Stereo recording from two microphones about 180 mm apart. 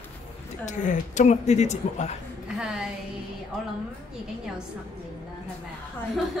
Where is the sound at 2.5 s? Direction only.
5° right (ahead or behind).